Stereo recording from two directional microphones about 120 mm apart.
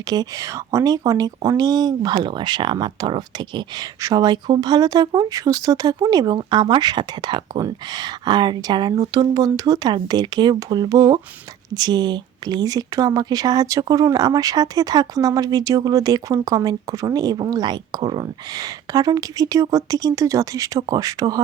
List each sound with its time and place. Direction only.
0.1 s speech: 30° right (ahead or behind)